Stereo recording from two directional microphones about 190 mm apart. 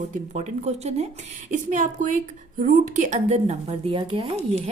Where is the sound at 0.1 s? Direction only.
40° right (ahead or behind).